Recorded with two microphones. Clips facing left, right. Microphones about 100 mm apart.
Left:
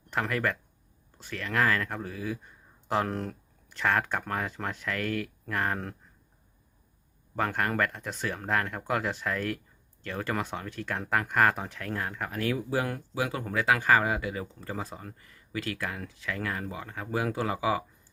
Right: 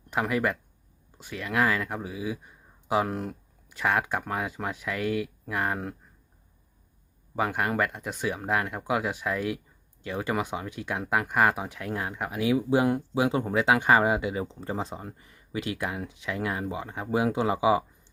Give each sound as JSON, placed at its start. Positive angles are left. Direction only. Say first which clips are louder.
{"t": 0.1, "sound": "speech", "louder": "right 3 dB", "side_deg": -10}
{"t": 7.3, "sound": "speech", "louder": "right 2 dB", "side_deg": -10}